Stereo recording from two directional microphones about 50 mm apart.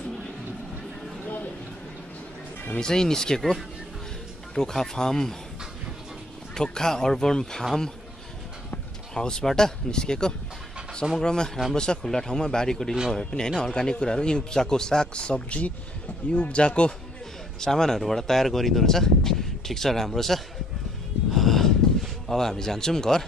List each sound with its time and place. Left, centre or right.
2.8 s speech: centre
4.6 s speech: centre
6.5 s speech: centre
9.1 s speech: centre
21.3 s a sound: centre